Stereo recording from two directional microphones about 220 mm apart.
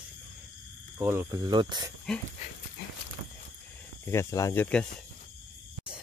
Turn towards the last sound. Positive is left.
turn(degrees=5)  # may be behind; listen again after turning